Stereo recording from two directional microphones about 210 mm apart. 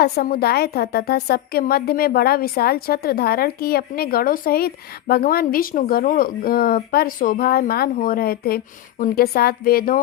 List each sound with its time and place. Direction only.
0.0 s a woman's voice: 45° left (ahead or behind)